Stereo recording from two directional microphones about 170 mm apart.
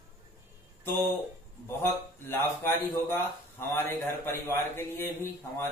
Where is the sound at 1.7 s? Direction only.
15° left (ahead or behind).